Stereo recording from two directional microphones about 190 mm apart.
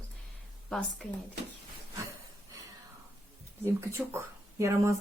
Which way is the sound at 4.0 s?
5° right (ahead or behind).